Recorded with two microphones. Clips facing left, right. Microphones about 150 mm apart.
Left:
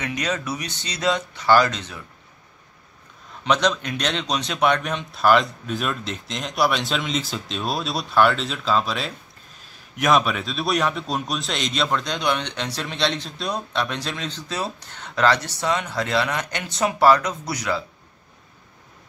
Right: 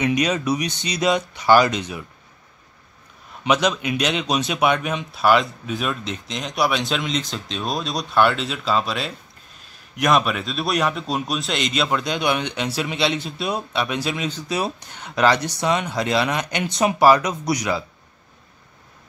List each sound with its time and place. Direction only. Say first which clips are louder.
0.0 s a man's voice: right 6 dB; 15° right (ahead or behind)
3.4 s a man's voice: right 1 dB; 10° right (ahead or behind)